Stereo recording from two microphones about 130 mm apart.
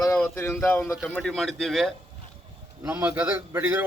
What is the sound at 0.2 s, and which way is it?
Speech, 15° left (ahead or behind).